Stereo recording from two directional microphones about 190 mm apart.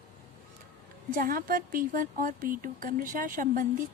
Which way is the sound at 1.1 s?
45° right (ahead or behind).